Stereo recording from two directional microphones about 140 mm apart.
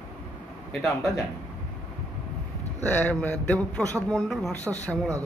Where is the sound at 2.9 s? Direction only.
10° left (ahead or behind).